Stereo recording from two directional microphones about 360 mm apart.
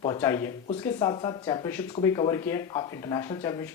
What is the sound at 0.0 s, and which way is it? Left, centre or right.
Speech, centre.